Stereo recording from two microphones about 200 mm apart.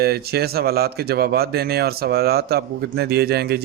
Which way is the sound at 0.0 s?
50° right (ahead or behind).